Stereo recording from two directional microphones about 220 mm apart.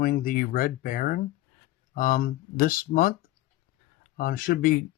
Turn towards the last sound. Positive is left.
turn(degrees=40)  # may be behind; listen again after turning